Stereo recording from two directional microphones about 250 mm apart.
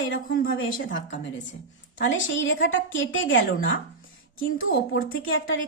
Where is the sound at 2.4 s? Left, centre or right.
Left.